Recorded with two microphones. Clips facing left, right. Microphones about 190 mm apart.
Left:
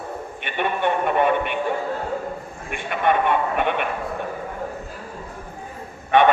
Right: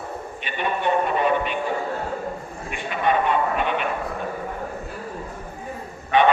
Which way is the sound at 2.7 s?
55° left (ahead or behind).